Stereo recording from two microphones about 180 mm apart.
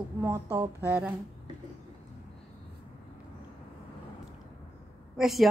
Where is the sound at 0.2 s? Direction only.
15° right (ahead or behind).